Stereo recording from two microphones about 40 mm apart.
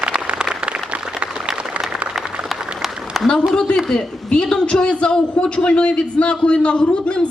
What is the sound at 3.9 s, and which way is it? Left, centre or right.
Speech, centre.